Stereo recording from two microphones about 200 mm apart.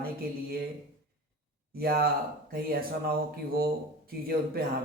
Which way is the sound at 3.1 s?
50° right (ahead or behind).